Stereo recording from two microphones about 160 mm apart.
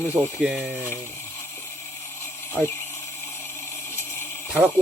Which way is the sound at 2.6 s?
Centre (ahead or behind).